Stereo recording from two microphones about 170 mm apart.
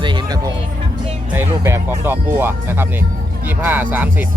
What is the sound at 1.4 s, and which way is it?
Speech, 15° right (ahead or behind).